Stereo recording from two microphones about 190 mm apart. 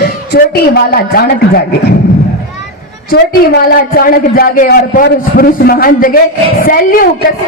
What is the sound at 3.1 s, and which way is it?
A man's voice, 55° left (ahead or behind).